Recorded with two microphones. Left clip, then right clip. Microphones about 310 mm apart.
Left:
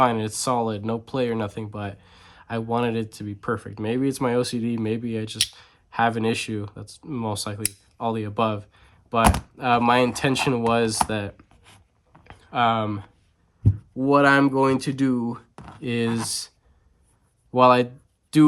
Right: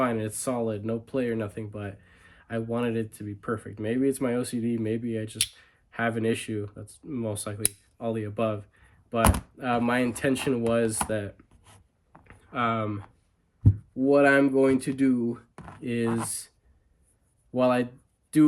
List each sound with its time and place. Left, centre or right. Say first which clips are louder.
0.0 s speech: left 7 dB; centre
11.6 s writing: left 5 dB; centre
14.0 s speech: left 3 dB; centre
17.5 s speech: left 8 dB; centre